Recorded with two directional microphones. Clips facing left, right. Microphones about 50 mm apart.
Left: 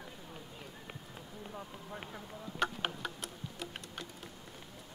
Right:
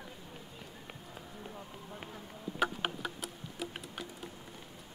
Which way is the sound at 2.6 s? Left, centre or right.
Centre.